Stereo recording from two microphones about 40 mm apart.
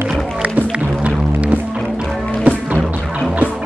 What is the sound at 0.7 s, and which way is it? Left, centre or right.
Music, right.